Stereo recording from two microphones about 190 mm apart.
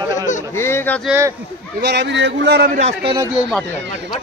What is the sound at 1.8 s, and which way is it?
Speech, 65° right (ahead or behind).